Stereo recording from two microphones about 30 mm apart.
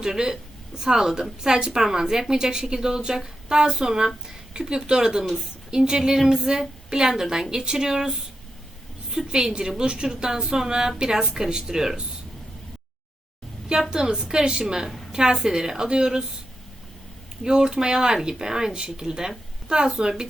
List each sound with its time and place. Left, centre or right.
0.0 s a woman's voice: right
9.3 s speech: right
13.9 s a woman's voice: right
17.4 s speech: right